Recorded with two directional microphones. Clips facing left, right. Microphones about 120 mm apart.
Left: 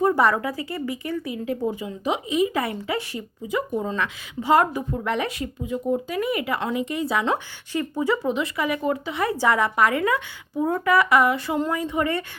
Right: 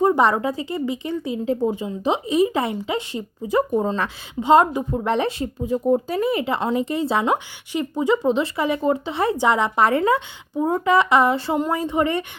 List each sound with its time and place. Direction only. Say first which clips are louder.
0.0 s speech: right 2 dB; 20° right (ahead or behind)
4.4 s speech: right 4 dB; 20° right (ahead or behind)
7.3 s speech: right 3 dB; 15° right (ahead or behind)